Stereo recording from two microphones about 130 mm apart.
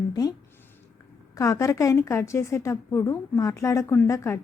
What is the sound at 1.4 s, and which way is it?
A woman's voice, 25° left (ahead or behind).